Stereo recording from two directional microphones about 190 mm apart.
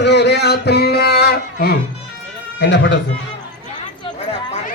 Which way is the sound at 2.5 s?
70° left (ahead or behind).